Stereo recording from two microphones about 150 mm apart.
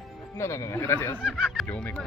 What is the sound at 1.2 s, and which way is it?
Speech, 5° right (ahead or behind).